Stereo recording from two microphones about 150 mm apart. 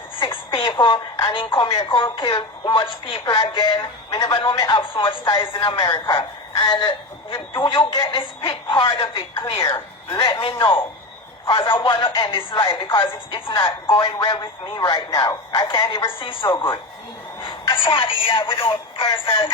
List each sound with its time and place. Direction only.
0.2 s speech: 35° left (ahead or behind)